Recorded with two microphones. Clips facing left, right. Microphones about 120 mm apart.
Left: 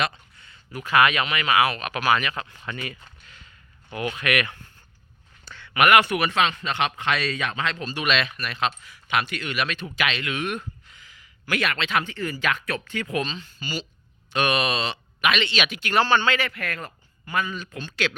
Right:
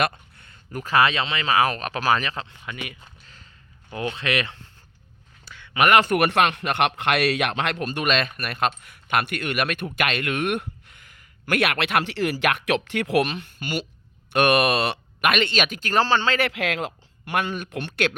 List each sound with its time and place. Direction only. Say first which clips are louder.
0.0 s speech: right 3 dB; 50° right (ahead or behind); by 2.6 s 30° right (ahead or behind)
2.6 s speech: left 1 dB; 15° right (ahead or behind)
3.9 s speech: even; 25° right (ahead or behind)
5.5 s a sound: even; 15° right (ahead or behind)
6.1 s speech: right 3 dB; 60° right (ahead or behind); by 16.4 s 30° right (ahead or behind)
16.4 s speech: right 6 dB; 90° right; by 18.1 s 60° right (ahead or behind)